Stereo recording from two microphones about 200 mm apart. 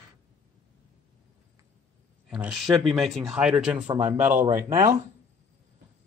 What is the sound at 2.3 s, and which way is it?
Speech, centre (ahead or behind).